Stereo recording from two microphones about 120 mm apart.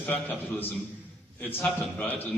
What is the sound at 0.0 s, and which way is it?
A man's voice, 15° left (ahead or behind).